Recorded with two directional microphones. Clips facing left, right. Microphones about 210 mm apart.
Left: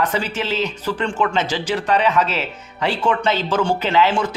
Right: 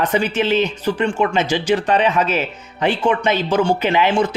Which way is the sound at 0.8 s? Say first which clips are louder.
Right 3 dB; 15° right (ahead or behind).